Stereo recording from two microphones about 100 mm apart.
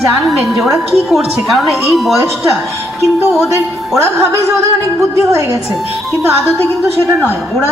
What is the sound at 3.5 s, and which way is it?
Speech, 30° right (ahead or behind).